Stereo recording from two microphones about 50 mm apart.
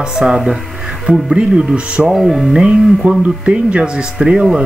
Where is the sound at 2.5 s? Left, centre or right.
Right.